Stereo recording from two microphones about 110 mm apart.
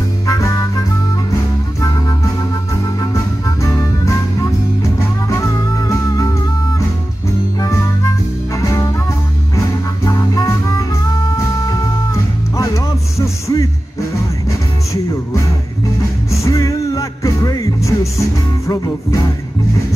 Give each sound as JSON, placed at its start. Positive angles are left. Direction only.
{"t": 0.3, "sound": "music", "side_deg": 25}
{"t": 8.5, "sound": "music", "side_deg": 30}
{"t": 10.0, "sound": "music", "side_deg": 30}
{"t": 16.4, "sound": "music", "side_deg": 30}